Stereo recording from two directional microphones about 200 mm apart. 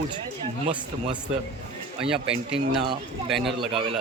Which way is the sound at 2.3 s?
30° right (ahead or behind).